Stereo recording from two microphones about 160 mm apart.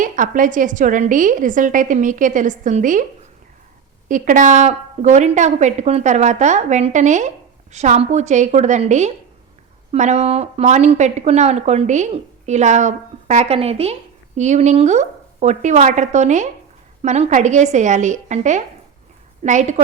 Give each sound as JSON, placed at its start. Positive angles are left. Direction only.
{"t": 0.0, "sound": "a woman's voice", "side_deg": -55}
{"t": 4.1, "sound": "a woman's voice", "side_deg": -55}